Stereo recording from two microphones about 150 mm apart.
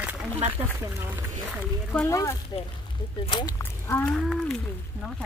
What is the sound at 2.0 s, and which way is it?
Speech, 20° left (ahead or behind).